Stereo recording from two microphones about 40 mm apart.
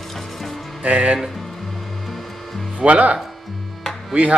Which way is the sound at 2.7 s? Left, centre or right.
Right.